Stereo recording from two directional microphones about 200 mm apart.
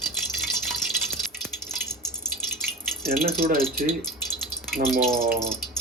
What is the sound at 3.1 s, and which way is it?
Speech, 45° right (ahead or behind).